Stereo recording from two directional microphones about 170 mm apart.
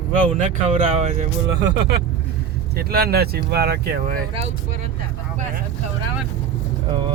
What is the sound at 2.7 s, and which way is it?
Speech, 65° right (ahead or behind).